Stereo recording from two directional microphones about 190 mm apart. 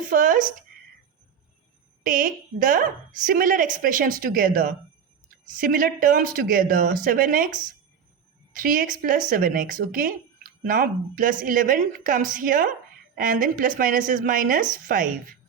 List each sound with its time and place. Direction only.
0.1 s a woman's voice: 45° right (ahead or behind)
2.0 s a woman's voice: 45° right (ahead or behind)